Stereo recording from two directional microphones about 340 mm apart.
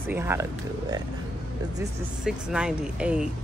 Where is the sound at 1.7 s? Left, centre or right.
Centre.